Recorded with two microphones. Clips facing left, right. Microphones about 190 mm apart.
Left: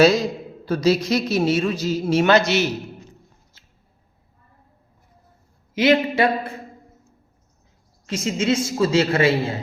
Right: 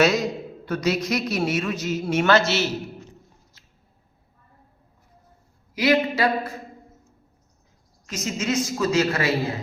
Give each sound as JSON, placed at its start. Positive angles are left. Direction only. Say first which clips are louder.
{"t": 0.6, "sound": "a man's voice", "louder": "left 5 dB", "side_deg": 30}
{"t": 2.2, "sound": "a man's voice", "louder": "left 2 dB", "side_deg": 15}
{"t": 3.6, "sound": "mouse", "louder": "left 1 dB", "side_deg": 30}
{"t": 5.7, "sound": "a man's voice", "louder": "left 3 dB", "side_deg": 25}
{"t": 8.0, "sound": "a man's voice", "louder": "left 5 dB", "side_deg": 30}